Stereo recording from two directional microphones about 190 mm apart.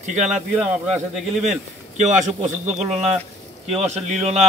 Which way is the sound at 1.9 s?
40° right (ahead or behind).